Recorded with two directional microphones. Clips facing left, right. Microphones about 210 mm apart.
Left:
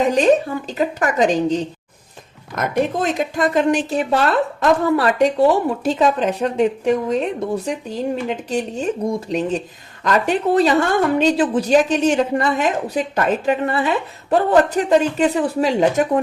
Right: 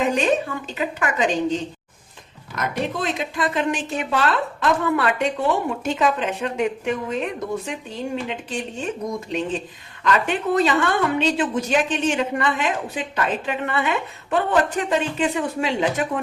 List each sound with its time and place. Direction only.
0.0 s speech: 35° left (ahead or behind)